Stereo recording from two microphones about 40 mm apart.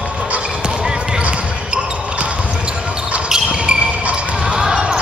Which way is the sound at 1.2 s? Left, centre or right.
Right.